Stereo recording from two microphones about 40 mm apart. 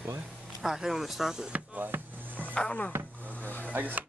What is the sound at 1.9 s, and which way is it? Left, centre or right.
Music, right.